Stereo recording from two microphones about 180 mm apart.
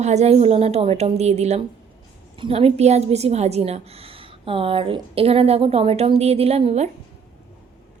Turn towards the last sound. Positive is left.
turn(degrees=-35)  # may be behind; listen again after turning